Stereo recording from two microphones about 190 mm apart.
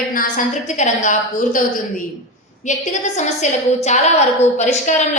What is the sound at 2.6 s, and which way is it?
Speech, 40° left (ahead or behind).